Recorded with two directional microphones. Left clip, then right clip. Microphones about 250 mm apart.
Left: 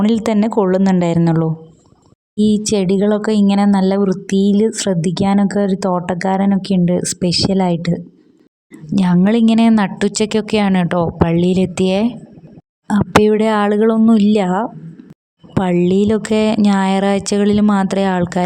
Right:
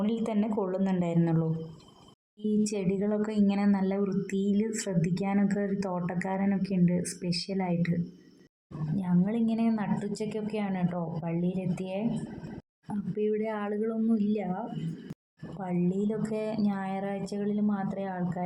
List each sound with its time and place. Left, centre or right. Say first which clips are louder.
0.0 s speech: left 15 dB; left
9.0 s speech: left 16 dB; left
15.6 s speech: left 17 dB; left